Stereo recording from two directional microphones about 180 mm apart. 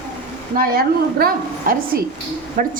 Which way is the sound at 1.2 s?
55° right (ahead or behind).